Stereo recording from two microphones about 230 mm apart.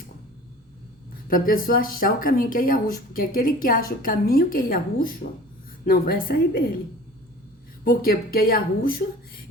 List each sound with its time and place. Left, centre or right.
1.3 s speech: left
7.9 s speech: left